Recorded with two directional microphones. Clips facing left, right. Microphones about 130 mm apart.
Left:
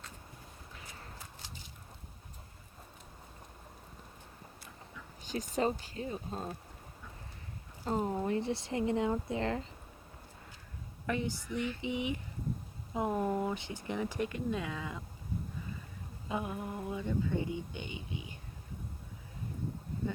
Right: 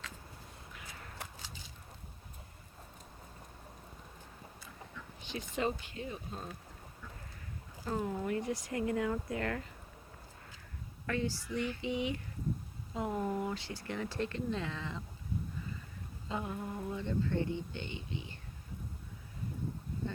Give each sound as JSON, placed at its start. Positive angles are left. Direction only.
{"t": 0.7, "sound": "a sound", "side_deg": 30}
{"t": 5.2, "sound": "speech", "side_deg": 40}
{"t": 7.9, "sound": "speech", "side_deg": 30}
{"t": 11.0, "sound": "speech", "side_deg": 20}
{"t": 16.3, "sound": "speech", "side_deg": 15}